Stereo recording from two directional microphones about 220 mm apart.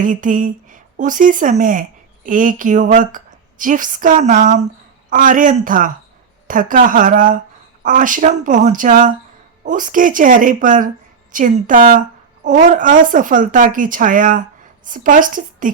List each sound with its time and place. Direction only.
0.0 s a woman's voice: 35° right (ahead or behind)